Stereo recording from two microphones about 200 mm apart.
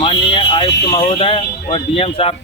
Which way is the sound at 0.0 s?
25° left (ahead or behind).